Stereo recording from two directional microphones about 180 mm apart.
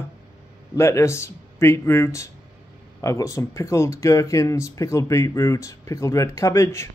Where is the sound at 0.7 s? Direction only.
15° left (ahead or behind).